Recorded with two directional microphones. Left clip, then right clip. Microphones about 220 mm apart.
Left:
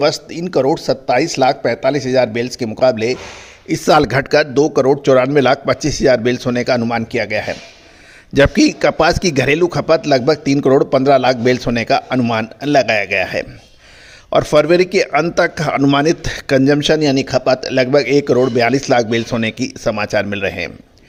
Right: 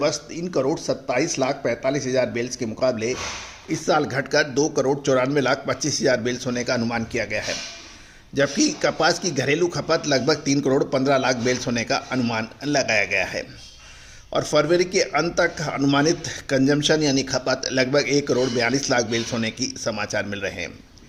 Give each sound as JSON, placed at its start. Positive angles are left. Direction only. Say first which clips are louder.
{"t": 0.0, "sound": "speech", "louder": "left 8 dB", "side_deg": 40}